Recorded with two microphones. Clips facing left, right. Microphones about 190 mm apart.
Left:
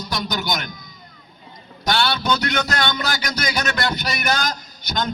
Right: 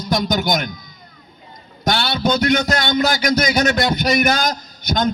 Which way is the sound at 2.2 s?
50° right (ahead or behind).